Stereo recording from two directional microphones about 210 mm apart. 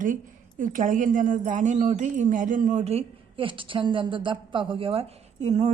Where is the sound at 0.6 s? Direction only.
40° right (ahead or behind).